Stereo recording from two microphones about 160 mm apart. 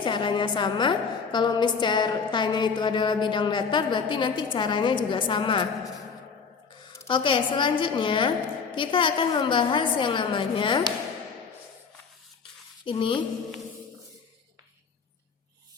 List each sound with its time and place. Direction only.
0.0 s a woman's voice: 30° left (ahead or behind)
7.1 s a woman's voice: 30° left (ahead or behind)
12.8 s speech: 30° left (ahead or behind)